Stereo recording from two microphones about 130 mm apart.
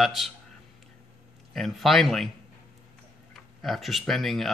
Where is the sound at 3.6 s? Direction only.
Centre (ahead or behind).